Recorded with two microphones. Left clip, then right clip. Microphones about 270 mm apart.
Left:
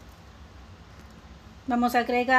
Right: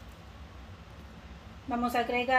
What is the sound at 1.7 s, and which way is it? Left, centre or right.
Speech, left.